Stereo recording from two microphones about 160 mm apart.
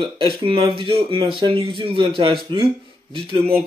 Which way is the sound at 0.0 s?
30° right (ahead or behind).